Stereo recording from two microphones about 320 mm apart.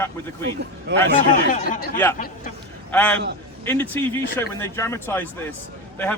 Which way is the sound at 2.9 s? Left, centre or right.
Centre.